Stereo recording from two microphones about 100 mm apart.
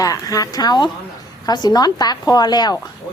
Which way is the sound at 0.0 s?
35° left (ahead or behind).